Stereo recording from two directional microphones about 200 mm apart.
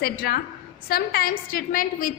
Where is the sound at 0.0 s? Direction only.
50° left (ahead or behind).